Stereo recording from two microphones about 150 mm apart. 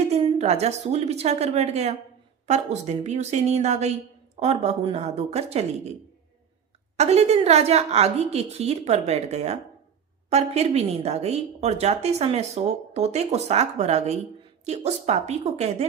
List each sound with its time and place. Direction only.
0.1 s speech: 45° right (ahead or behind)
6.9 s speech: 45° right (ahead or behind)